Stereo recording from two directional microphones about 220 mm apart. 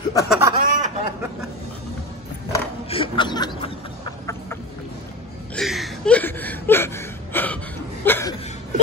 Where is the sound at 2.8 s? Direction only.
25° left (ahead or behind).